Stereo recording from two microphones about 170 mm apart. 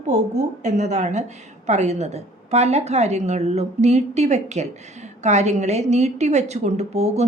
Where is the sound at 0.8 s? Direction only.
45° right (ahead or behind).